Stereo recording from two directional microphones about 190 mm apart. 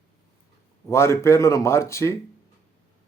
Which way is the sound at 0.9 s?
15° left (ahead or behind).